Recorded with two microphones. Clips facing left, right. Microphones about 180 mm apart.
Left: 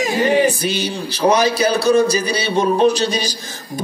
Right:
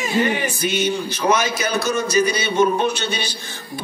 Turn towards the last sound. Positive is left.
turn(degrees=40)  # may be behind; listen again after turning